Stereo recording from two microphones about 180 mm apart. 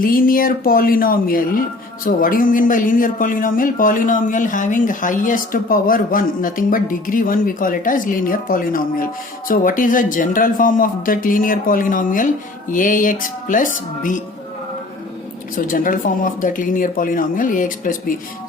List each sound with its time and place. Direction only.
0.0 s speech: 50° left (ahead or behind)
15.5 s speech: 50° left (ahead or behind)